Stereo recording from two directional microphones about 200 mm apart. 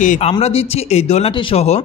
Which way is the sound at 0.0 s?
40° left (ahead or behind).